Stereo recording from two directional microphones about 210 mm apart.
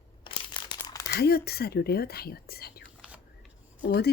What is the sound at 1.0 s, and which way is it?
Speech, 50° left (ahead or behind).